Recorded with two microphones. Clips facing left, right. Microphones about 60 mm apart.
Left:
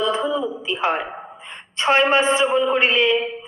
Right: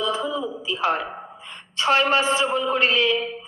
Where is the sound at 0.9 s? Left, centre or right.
Left.